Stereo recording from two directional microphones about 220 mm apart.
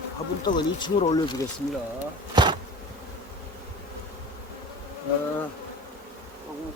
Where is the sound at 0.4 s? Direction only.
20° left (ahead or behind).